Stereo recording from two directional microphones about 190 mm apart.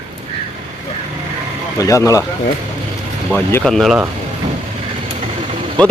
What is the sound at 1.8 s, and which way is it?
Speech, 15° left (ahead or behind).